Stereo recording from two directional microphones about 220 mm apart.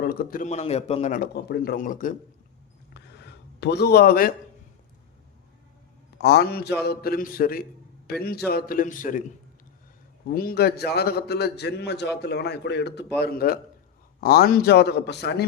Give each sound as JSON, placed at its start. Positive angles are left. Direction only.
{"t": 0.0, "sound": "a man's voice", "side_deg": 40}
{"t": 1.3, "sound": "a man's voice", "side_deg": 45}
{"t": 2.9, "sound": "a sound", "side_deg": 50}
{"t": 6.1, "sound": "a man's voice", "side_deg": 50}
{"t": 10.3, "sound": "a man's voice", "side_deg": 45}